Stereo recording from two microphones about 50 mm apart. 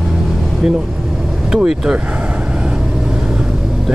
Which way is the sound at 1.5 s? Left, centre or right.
Centre.